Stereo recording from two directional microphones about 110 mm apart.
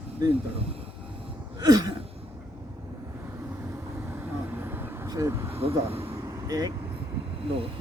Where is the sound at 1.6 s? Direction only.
35° right (ahead or behind).